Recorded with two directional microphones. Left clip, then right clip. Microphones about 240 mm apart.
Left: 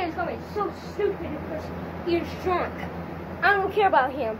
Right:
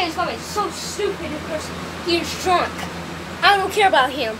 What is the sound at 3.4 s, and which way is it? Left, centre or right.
Speech, centre.